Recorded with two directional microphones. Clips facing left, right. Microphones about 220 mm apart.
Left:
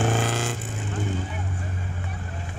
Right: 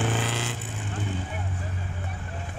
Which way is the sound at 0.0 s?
45° left (ahead or behind).